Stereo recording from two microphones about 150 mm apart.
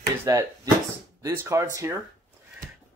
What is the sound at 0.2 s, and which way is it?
Speech, 15° right (ahead or behind).